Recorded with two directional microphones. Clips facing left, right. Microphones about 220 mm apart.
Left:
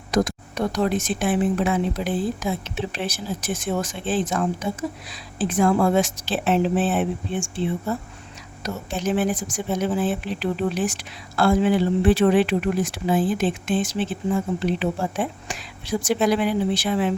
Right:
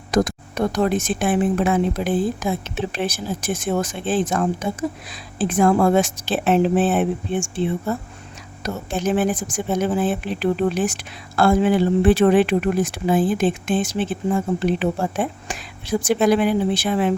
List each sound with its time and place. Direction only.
0.1 s speech: 50° right (ahead or behind)
8.6 s speech: 50° right (ahead or behind)